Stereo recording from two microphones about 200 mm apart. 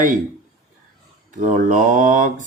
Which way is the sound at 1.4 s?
40° right (ahead or behind).